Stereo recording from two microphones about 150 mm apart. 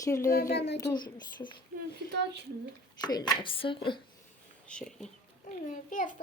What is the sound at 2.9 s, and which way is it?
Speech, 30° left (ahead or behind).